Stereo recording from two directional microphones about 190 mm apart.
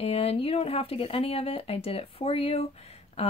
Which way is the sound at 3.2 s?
30° left (ahead or behind).